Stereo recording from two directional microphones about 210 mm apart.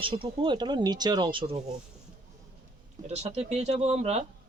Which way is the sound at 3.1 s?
30° right (ahead or behind).